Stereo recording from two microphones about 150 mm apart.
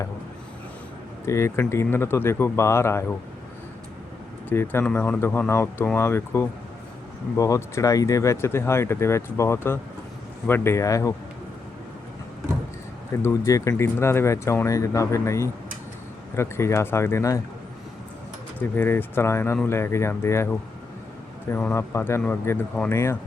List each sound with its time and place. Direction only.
1.2 s speech: 20° left (ahead or behind)
4.4 s speech: 15° left (ahead or behind)
13.2 s speech: 20° left (ahead or behind)
18.7 s speech: 15° left (ahead or behind)